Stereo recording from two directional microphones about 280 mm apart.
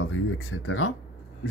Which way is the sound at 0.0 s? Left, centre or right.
Left.